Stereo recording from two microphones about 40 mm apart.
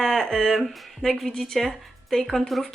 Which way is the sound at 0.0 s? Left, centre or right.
Centre.